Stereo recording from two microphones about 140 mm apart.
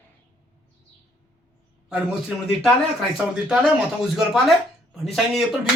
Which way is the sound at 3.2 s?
5° right (ahead or behind).